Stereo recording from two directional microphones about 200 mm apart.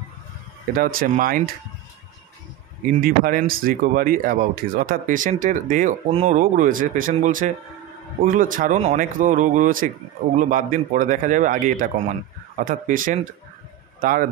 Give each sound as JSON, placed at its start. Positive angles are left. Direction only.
{"t": 0.7, "sound": "speech", "side_deg": -45}
{"t": 3.0, "sound": "a man's voice", "side_deg": -45}